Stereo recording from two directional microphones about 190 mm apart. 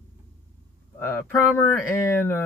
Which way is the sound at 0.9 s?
10° left (ahead or behind).